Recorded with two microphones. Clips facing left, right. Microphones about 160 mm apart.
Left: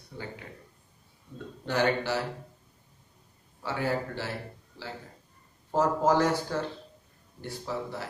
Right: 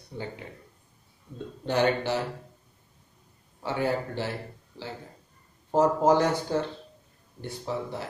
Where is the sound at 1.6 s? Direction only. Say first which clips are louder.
Right 2 dB; 20° right (ahead or behind).